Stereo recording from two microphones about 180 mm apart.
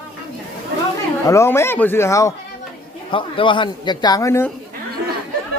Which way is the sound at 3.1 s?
30° left (ahead or behind).